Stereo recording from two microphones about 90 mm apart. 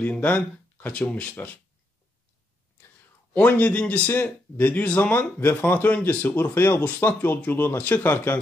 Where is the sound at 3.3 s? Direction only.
15° left (ahead or behind).